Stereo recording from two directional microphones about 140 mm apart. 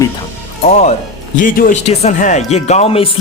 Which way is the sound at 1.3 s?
80° left.